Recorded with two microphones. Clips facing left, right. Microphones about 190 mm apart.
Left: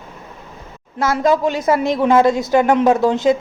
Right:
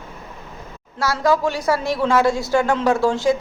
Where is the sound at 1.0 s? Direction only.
20° left (ahead or behind).